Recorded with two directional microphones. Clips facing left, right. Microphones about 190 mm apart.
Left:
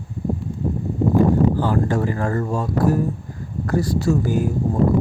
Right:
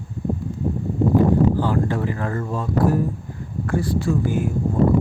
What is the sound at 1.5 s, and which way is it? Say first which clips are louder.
Speech: left 1 dB; 45° left (ahead or behind).